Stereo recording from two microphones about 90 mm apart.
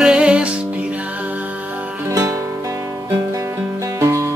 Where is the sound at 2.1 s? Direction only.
40° right (ahead or behind).